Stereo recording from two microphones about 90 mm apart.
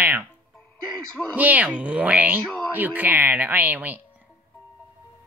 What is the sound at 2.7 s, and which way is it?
Speech, 20° right (ahead or behind).